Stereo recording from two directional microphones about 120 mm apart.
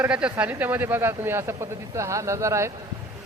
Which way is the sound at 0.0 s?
10° right (ahead or behind).